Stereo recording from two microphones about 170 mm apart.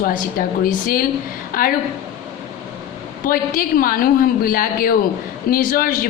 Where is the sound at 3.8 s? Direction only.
55° left (ahead or behind).